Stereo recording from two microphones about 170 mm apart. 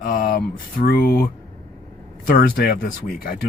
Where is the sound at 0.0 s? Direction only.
55° left (ahead or behind).